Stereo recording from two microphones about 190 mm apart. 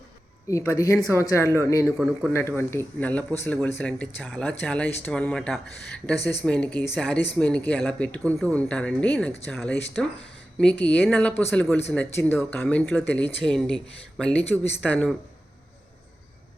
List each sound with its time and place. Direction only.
0.4 s speech: 15° left (ahead or behind)